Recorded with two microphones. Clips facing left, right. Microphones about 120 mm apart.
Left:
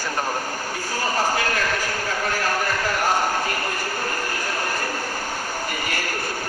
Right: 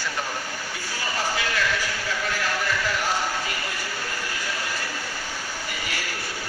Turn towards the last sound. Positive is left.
turn(degrees=50)  # may be behind; listen again after turning